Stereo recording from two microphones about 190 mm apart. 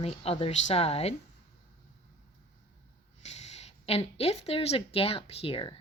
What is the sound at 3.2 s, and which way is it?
A woman's voice, 35° left (ahead or behind).